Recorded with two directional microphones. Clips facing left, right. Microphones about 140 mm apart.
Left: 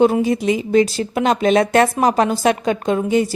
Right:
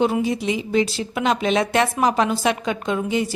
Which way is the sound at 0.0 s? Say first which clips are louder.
Left 5 dB; 45° left (ahead or behind).